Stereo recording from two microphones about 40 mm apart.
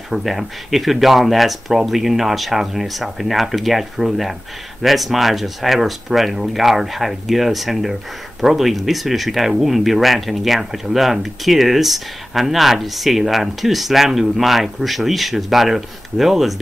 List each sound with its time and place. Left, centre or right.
0.1 s speech: centre